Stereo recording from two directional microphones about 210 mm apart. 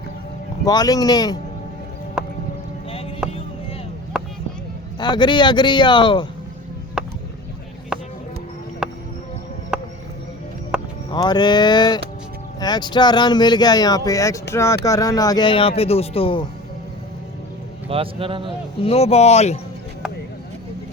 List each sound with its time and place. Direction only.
0.6 s speech: 20° left (ahead or behind)
2.2 s music: 5° right (ahead or behind)
3.2 s vehicle: 5° right (ahead or behind)
4.1 s a sound: 5° right (ahead or behind)
4.9 s speech: 20° left (ahead or behind)
7.0 s a sound: 5° right (ahead or behind)
8.8 s music: 5° right (ahead or behind)
9.7 s a sound: 5° right (ahead or behind)
10.7 s music: 5° right (ahead or behind)
11.1 s speech: 20° left (ahead or behind)
17.8 s speech: 25° right (ahead or behind)
18.8 s speech: 30° left (ahead or behind)